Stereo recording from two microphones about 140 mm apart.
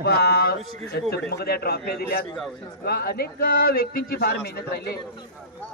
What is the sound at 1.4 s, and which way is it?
A man's voice, 90° left.